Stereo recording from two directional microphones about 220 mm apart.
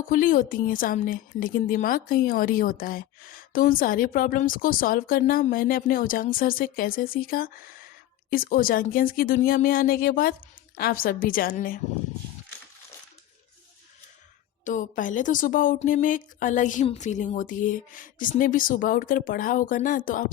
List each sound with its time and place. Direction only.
0.1 s a woman's voice: 40° left (ahead or behind)
14.6 s a woman's voice: 35° left (ahead or behind)